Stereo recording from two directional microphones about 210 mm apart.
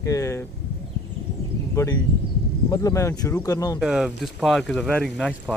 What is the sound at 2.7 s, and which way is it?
Speech, 15° left (ahead or behind).